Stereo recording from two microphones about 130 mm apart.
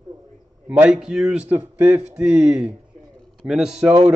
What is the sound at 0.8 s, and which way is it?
Speech, 5° right (ahead or behind).